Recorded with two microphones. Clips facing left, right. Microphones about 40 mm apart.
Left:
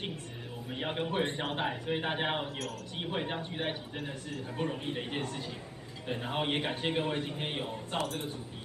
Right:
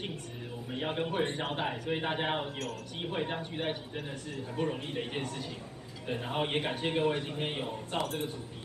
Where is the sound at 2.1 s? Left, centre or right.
Centre.